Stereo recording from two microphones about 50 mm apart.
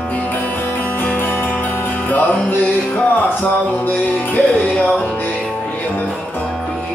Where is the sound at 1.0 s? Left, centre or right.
Left.